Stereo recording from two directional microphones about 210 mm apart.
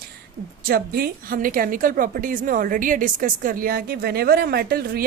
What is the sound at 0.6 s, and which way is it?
A woman's voice, 45° right (ahead or behind).